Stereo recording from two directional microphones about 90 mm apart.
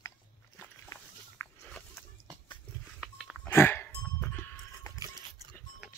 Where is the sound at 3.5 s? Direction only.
25° left (ahead or behind).